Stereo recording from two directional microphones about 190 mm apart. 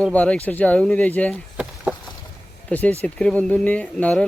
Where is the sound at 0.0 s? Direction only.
5° left (ahead or behind).